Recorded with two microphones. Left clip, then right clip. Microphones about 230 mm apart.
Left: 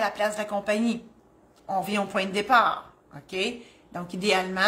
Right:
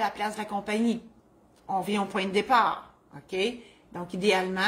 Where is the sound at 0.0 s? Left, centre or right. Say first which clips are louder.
Left 3 dB; centre.